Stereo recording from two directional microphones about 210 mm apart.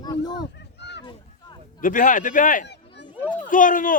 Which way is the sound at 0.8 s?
55° left (ahead or behind).